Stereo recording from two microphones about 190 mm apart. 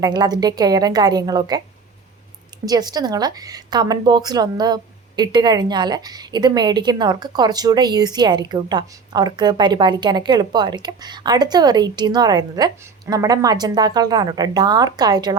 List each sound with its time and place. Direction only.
0.0 s a woman's voice: 20° right (ahead or behind)
2.6 s a woman's voice: 20° right (ahead or behind)